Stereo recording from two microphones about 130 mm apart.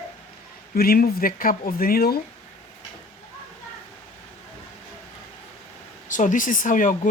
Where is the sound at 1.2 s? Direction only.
90° left.